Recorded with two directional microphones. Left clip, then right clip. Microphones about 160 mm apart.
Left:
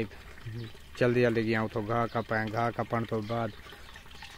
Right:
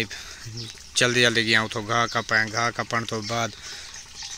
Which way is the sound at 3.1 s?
20° right (ahead or behind).